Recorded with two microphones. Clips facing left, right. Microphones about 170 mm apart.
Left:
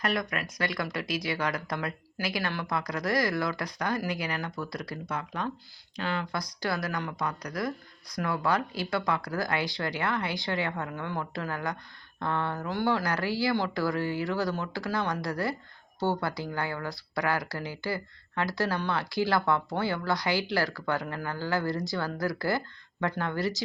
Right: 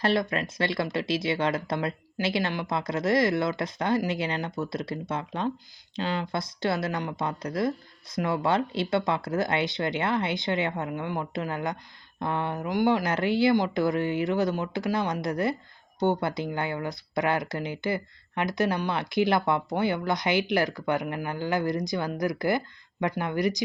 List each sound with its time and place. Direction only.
0.0 s speech: 30° right (ahead or behind)